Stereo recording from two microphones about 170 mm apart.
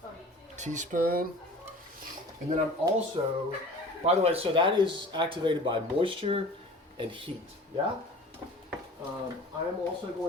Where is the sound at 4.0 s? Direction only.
35° right (ahead or behind).